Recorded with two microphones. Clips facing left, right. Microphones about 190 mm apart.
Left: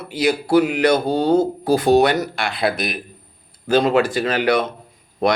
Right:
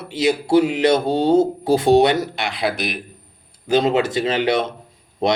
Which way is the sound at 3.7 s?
25° right (ahead or behind).